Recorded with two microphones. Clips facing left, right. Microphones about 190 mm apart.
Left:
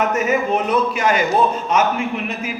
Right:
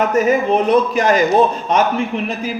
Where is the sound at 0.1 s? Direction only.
35° right (ahead or behind).